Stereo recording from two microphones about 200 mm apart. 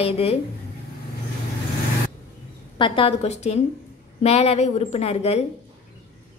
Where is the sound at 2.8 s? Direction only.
25° left (ahead or behind).